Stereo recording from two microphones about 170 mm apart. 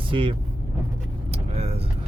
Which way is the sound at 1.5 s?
40° right (ahead or behind).